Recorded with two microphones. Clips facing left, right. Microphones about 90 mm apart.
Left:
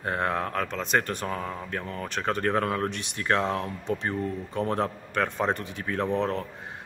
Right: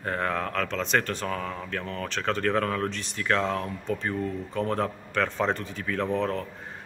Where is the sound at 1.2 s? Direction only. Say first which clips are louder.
Even; 25° left (ahead or behind).